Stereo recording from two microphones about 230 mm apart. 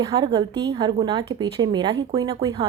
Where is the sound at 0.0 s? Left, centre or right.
Centre.